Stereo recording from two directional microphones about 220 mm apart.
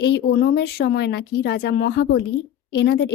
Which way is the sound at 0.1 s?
50° left (ahead or behind).